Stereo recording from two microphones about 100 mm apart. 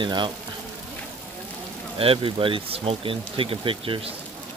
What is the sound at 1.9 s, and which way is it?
Speech, 70° right (ahead or behind).